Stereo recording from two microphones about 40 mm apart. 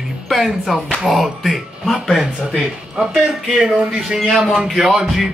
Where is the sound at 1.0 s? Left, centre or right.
Centre.